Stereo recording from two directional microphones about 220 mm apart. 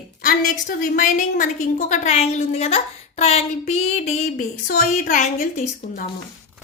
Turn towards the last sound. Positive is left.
turn(degrees=35)  # may be behind; listen again after turning